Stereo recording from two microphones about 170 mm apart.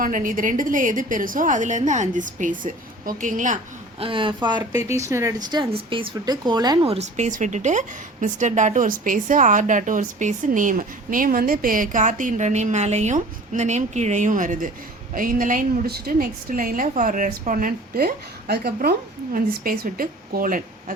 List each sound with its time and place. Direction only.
0.0 s a woman's voice: 50° right (ahead or behind)
4.0 s speech: 30° right (ahead or behind)
6.8 s a woman's voice: 40° right (ahead or behind)